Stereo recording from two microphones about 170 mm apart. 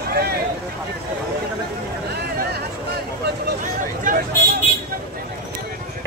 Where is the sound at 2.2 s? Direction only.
65° right (ahead or behind).